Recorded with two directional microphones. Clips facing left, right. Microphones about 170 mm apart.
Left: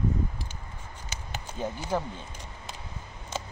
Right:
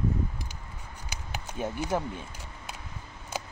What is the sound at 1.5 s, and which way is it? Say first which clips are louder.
Speech: right 1 dB; 10° right (ahead or behind).